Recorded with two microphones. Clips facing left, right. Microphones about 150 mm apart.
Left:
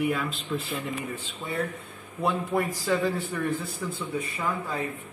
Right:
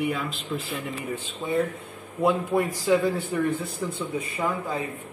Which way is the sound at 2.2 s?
20° right (ahead or behind).